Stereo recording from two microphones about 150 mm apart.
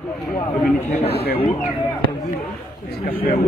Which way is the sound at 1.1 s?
90° left.